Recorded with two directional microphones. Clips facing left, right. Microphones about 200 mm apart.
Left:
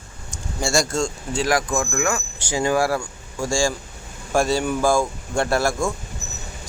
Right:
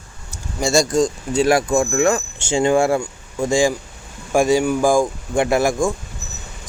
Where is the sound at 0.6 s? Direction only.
20° right (ahead or behind).